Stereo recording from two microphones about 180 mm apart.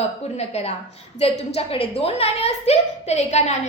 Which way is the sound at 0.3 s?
35° left (ahead or behind).